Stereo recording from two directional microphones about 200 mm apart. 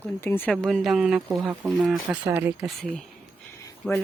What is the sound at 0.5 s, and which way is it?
Speech, centre (ahead or behind).